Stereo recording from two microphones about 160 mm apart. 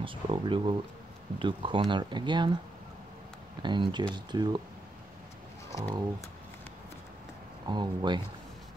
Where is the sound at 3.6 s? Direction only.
30° right (ahead or behind).